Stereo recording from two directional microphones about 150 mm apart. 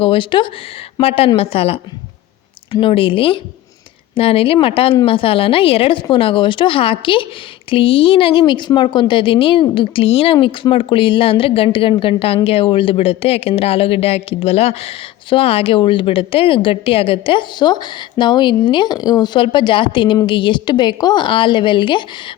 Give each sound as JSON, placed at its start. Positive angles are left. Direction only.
{"t": 0.0, "sound": "a woman's voice", "side_deg": 35}
{"t": 2.8, "sound": "a woman's voice", "side_deg": 35}